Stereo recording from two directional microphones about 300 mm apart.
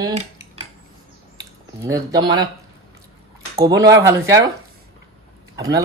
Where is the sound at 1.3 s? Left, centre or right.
Centre.